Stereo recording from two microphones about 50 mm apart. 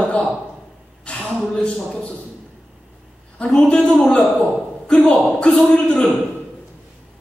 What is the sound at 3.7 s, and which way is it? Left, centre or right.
A man's voice, centre.